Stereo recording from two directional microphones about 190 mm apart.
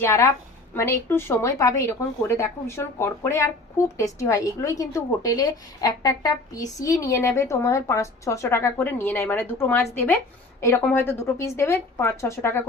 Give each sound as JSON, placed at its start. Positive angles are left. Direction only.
{"t": 0.0, "sound": "a woman's voice", "side_deg": 15}